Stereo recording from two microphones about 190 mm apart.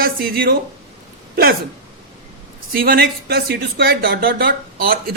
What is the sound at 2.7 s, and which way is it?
Speech, 50° right (ahead or behind).